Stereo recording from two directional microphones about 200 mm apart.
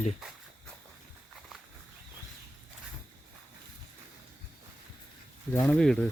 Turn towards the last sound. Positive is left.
turn(degrees=0)  # may be behind; listen again after turning